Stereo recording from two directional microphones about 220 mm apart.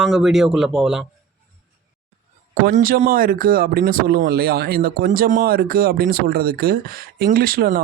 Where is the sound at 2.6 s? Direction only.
40° right (ahead or behind).